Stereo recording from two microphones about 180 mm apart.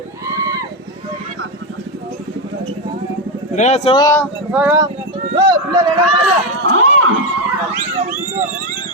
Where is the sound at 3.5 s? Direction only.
40° left (ahead or behind).